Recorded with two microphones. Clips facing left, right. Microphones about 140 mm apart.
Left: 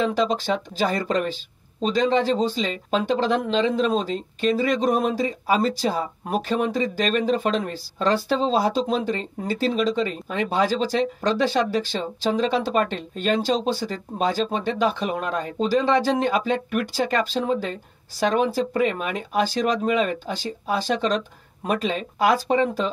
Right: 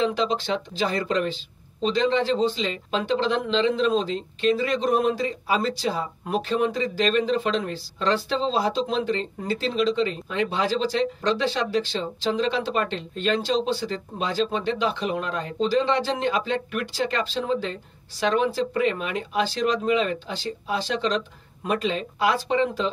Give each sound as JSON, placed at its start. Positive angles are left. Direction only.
{"t": 0.0, "sound": "speech", "side_deg": 45}